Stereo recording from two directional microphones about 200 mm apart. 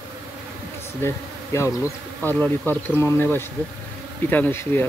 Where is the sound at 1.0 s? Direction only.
15° left (ahead or behind).